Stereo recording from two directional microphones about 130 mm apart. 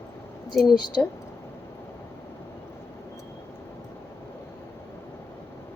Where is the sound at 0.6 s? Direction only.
35° left (ahead or behind).